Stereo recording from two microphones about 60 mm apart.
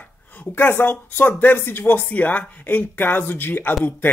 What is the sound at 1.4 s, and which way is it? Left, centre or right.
Speech, left.